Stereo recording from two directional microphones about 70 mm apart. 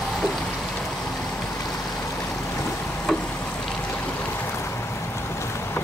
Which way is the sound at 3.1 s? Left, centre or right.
Centre.